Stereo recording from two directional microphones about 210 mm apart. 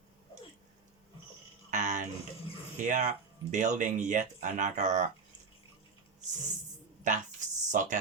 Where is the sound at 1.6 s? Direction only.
35° right (ahead or behind).